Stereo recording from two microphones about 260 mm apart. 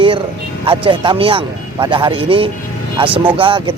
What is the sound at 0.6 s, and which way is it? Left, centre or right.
Speech, centre.